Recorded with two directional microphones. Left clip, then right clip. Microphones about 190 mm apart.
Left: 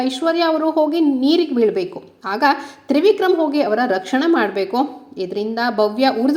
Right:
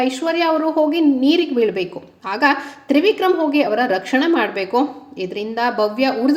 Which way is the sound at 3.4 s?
25° left (ahead or behind).